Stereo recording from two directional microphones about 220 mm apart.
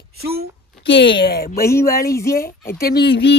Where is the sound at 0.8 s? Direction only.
55° left (ahead or behind).